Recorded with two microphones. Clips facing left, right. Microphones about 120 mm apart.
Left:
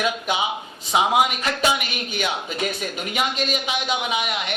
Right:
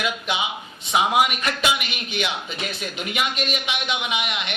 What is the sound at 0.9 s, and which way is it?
A man's voice, 30° left (ahead or behind).